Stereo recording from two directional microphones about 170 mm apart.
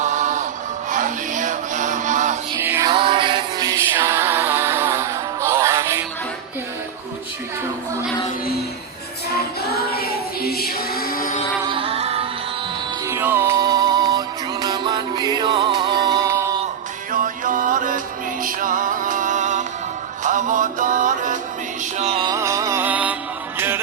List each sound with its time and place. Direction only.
0.0 s music: 45° right (ahead or behind)
2.6 s music: 15° right (ahead or behind)
2.9 s music: 30° right (ahead or behind)
9.6 s music: 65° left (ahead or behind)
11.7 s music: 35° right (ahead or behind)
13.1 s music: 15° right (ahead or behind)
17.1 s music: 50° right (ahead or behind)
22.2 s music: 20° right (ahead or behind)